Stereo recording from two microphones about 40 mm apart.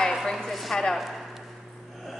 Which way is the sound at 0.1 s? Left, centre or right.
Centre.